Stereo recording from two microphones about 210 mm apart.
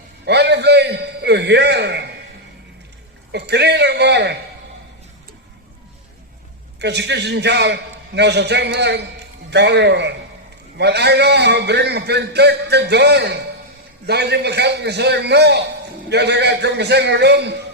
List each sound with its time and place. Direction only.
0.3 s a sound: 55° right (ahead or behind)
3.3 s a man's voice: 50° right (ahead or behind)
6.7 s a man's voice: 55° right (ahead or behind)